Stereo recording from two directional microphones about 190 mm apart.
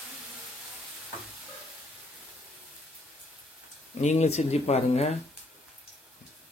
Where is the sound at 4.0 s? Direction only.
40° left (ahead or behind).